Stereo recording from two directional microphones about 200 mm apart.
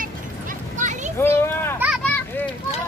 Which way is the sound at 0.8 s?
35° right (ahead or behind).